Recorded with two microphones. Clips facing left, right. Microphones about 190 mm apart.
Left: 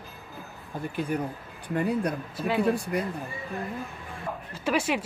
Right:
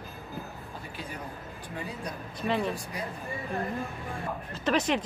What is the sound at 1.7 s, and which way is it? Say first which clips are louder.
Speech: left 12 dB; 60° left (ahead or behind).